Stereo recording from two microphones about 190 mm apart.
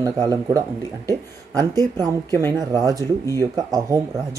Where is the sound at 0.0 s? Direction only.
20° right (ahead or behind).